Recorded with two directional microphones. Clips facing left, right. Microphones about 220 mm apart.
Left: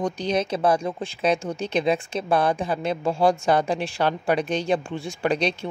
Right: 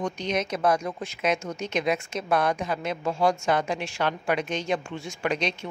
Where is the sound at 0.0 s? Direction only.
35° left (ahead or behind).